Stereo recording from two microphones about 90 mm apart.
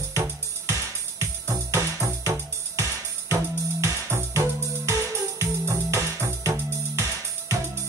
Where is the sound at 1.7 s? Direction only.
35° right (ahead or behind).